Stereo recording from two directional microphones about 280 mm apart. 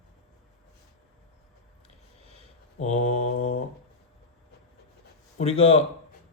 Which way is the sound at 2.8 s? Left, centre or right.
Left.